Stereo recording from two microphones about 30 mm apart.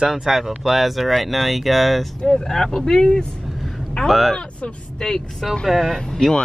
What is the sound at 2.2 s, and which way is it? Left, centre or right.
Speech, centre.